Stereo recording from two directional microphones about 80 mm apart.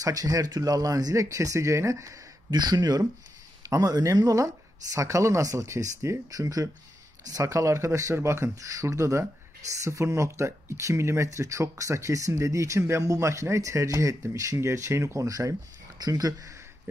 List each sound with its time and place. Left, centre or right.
0.0 s speech: right
2.5 s speech: right
15.2 s speech: right